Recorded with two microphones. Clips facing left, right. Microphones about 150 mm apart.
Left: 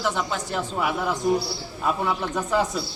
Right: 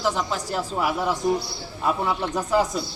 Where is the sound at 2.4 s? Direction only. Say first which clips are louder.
Right 2 dB; 5° right (ahead or behind).